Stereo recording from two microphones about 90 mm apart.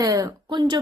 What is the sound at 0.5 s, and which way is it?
Speech, 55° right (ahead or behind).